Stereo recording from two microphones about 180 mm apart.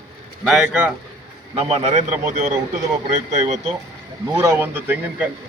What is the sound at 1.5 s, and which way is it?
A man's voice, 35° right (ahead or behind).